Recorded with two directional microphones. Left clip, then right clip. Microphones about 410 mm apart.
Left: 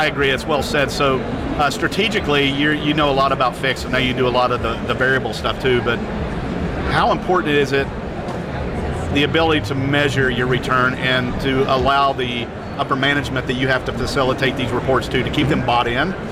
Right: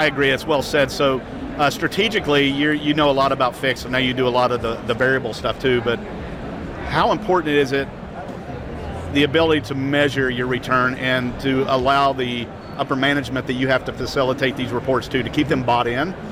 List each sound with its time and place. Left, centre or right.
0.0 s speech: right
9.1 s speech: right